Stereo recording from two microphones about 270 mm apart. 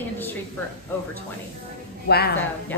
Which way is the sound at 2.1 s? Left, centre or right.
Left.